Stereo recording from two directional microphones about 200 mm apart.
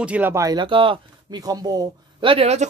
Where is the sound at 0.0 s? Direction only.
10° right (ahead or behind).